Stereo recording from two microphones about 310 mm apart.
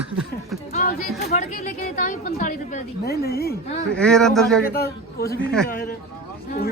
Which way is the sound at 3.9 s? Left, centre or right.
Centre.